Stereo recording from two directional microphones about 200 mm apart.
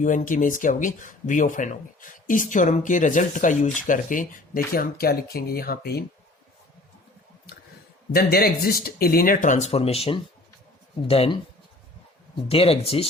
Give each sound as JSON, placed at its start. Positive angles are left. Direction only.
{"t": 0.0, "sound": "speech", "side_deg": 40}
{"t": 8.1, "sound": "speech", "side_deg": 50}
{"t": 12.5, "sound": "speech", "side_deg": 30}